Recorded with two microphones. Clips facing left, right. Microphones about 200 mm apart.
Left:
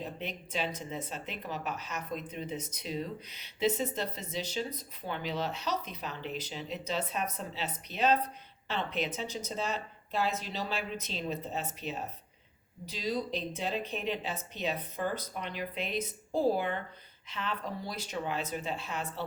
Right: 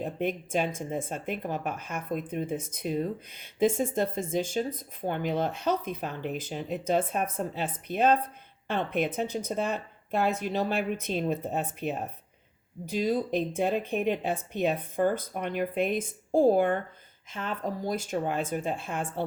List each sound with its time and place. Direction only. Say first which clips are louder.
0.0 s speech: right 9 dB; 50° right (ahead or behind)